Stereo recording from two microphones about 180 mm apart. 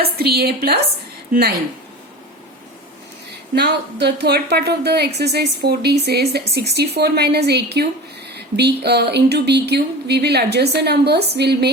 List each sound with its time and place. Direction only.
0.0 s a woman's voice: 60° right (ahead or behind)
3.5 s a woman's voice: 65° right (ahead or behind)